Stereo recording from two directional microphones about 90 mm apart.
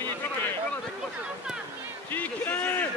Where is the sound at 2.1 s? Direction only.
20° left (ahead or behind).